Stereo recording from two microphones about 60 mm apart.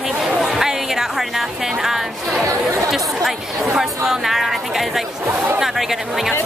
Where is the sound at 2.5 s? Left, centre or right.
Right.